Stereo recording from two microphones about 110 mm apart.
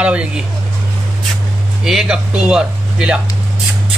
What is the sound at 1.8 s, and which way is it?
Speech, 5° right (ahead or behind).